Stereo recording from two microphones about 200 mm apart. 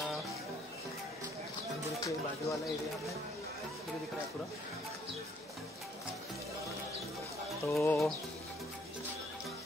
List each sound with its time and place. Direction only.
2.0 s speech: 15° left (ahead or behind)
7.6 s speech: 10° left (ahead or behind)